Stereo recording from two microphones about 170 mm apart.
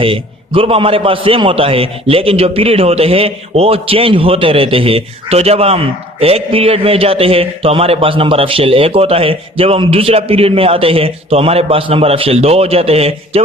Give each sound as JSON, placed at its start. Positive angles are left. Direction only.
{"t": 0.0, "sound": "a man's voice", "side_deg": -30}